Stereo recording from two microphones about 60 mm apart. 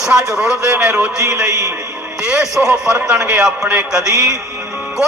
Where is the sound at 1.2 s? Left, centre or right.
Right.